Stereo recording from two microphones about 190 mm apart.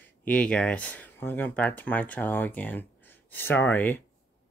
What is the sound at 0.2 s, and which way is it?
Speech, 5° left (ahead or behind).